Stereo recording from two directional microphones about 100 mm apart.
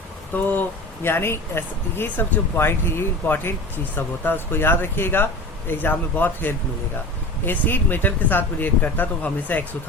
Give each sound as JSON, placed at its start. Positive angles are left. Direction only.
{"t": 0.3, "sound": "speech", "side_deg": 15}